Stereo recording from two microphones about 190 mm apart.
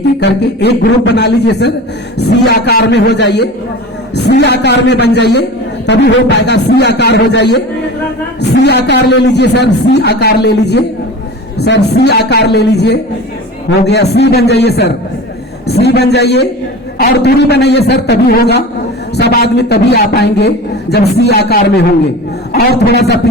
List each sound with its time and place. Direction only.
0.2 s a man's voice: 65° left (ahead or behind)